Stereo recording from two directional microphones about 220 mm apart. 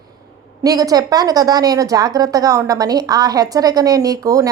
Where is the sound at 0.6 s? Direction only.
15° right (ahead or behind).